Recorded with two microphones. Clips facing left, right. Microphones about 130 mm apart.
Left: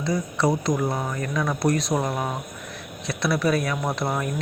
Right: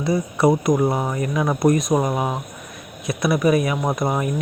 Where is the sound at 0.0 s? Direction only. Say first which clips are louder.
Right 5 dB; 25° right (ahead or behind).